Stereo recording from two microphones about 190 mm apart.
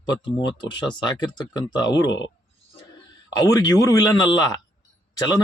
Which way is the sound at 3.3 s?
15° left (ahead or behind).